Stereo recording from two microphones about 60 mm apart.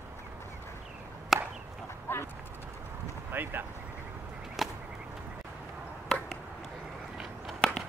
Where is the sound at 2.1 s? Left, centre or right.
Left.